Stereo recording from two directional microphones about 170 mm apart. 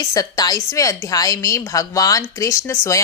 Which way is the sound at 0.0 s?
20° left (ahead or behind).